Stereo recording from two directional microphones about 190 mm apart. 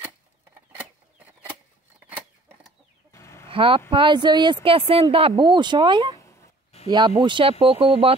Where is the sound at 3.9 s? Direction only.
25° right (ahead or behind).